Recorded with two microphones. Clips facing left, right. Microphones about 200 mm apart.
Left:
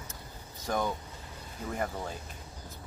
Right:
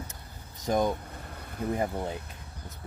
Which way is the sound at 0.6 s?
20° right (ahead or behind).